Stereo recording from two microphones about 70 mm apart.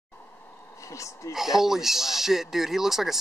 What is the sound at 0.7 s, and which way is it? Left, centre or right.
Speech, left.